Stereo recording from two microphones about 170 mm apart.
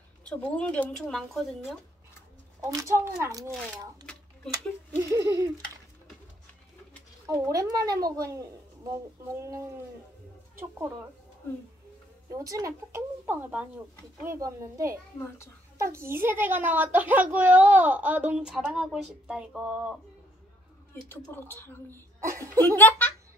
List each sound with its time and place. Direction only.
0.6 s speech: 5° left (ahead or behind)
2.7 s a child's voice: 20° right (ahead or behind)
7.2 s a child's voice: 20° right (ahead or behind)
12.3 s speech: 20° right (ahead or behind)
15.1 s a woman's voice: 15° left (ahead or behind)
15.8 s speech: 15° right (ahead or behind)
20.9 s a woman's voice: 10° left (ahead or behind)
22.2 s speech: 15° right (ahead or behind)
22.7 s speech: 10° left (ahead or behind)